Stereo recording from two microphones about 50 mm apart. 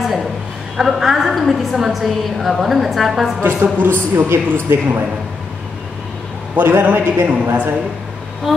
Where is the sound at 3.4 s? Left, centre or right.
Right.